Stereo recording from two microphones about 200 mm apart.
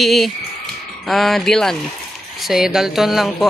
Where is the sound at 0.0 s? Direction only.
Centre (ahead or behind).